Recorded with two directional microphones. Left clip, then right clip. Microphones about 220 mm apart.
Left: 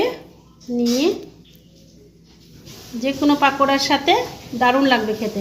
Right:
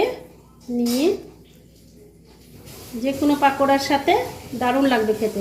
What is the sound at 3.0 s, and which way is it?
Speech, 45° left (ahead or behind).